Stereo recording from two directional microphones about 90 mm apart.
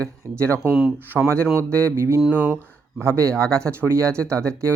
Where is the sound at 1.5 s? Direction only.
30° right (ahead or behind).